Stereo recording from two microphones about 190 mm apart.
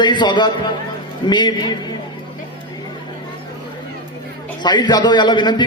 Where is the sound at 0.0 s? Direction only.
25° left (ahead or behind).